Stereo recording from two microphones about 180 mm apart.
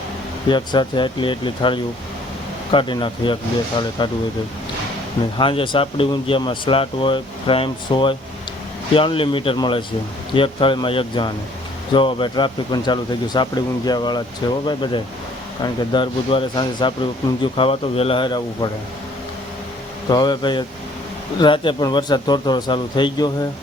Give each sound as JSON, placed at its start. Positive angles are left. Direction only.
{"t": 0.4, "sound": "speech", "side_deg": 25}
{"t": 5.4, "sound": "speech", "side_deg": 30}
{"t": 20.1, "sound": "speech", "side_deg": 25}